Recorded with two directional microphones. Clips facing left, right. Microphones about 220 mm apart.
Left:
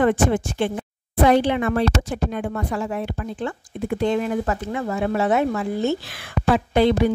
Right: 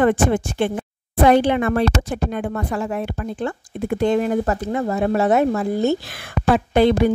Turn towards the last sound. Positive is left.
turn(degrees=-50)  # may be behind; listen again after turning